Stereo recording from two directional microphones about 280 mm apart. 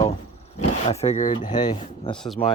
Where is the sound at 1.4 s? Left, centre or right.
Centre.